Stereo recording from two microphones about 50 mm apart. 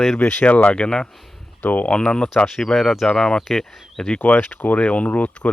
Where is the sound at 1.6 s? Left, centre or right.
Left.